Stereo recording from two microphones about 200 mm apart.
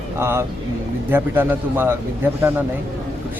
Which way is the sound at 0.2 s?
15° right (ahead or behind).